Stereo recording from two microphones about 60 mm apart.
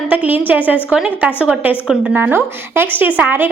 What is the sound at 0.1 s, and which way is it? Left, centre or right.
Speech, right.